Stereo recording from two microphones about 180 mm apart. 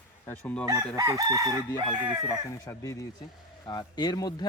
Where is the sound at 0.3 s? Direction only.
5° left (ahead or behind).